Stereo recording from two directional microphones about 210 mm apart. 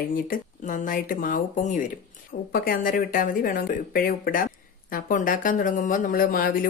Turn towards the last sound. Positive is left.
turn(degrees=40)  # may be behind; listen again after turning